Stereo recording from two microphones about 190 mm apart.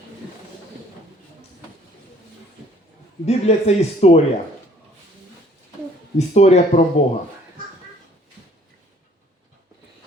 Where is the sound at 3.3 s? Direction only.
35° left (ahead or behind).